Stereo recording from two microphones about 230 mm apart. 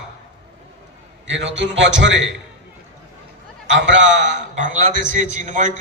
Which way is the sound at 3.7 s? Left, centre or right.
Right.